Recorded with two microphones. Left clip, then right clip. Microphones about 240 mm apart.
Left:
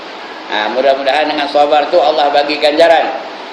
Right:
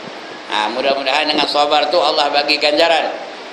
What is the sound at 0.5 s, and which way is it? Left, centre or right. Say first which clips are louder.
A man's voice: left 5 dB; centre.